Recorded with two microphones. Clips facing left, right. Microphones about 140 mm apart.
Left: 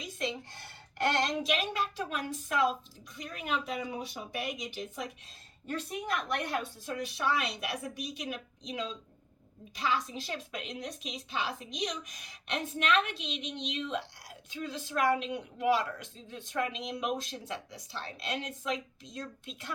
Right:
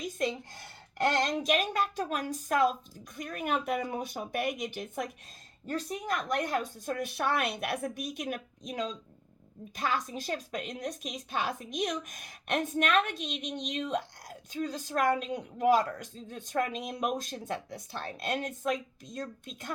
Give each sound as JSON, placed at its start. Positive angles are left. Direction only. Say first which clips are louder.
{"t": 0.0, "sound": "a sound", "louder": "right 4 dB", "side_deg": -45}
{"t": 0.9, "sound": "a woman's voice", "louder": "right 2 dB", "side_deg": -45}
{"t": 5.6, "sound": "a woman's voice", "louder": "right 2 dB", "side_deg": -40}